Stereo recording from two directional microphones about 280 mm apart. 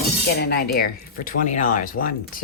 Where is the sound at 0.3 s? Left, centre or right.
Left.